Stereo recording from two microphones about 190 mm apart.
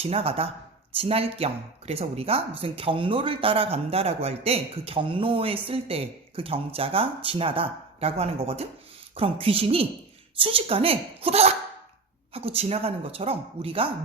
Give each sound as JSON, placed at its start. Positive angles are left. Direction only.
{"t": 0.0, "sound": "speech", "side_deg": -30}